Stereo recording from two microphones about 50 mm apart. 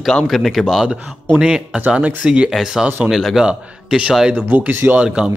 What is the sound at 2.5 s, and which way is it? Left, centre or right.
Speech, centre.